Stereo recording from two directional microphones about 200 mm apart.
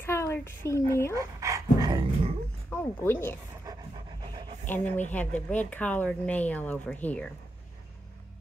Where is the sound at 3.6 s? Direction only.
20° right (ahead or behind).